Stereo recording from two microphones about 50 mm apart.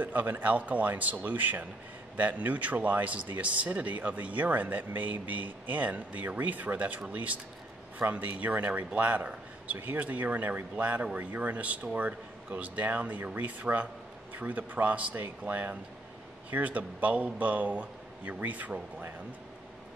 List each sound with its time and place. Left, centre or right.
0.0 s speech: right